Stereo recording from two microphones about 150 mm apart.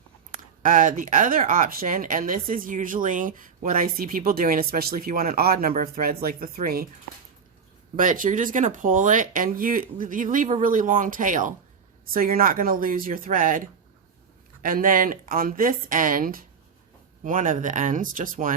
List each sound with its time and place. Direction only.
0.6 s speech: 60° right (ahead or behind); by 6.8 s 80° right
7.9 s speech: 65° right (ahead or behind)
12.1 s speech: 70° right (ahead or behind)